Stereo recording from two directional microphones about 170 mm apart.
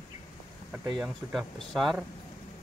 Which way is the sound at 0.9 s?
Centre (ahead or behind).